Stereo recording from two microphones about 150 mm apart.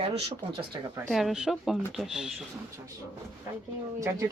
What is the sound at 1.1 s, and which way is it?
Speech, centre (ahead or behind).